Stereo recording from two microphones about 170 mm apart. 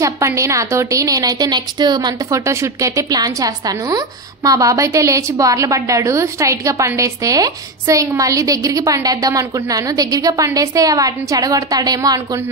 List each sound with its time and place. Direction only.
0.0 s a woman's voice: 20° right (ahead or behind)